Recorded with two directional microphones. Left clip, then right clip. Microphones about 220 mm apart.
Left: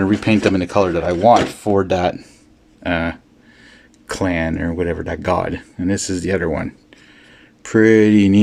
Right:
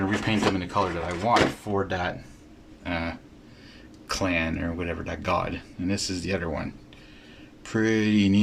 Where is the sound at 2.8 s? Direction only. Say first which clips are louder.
Left 10 dB; 35° left (ahead or behind).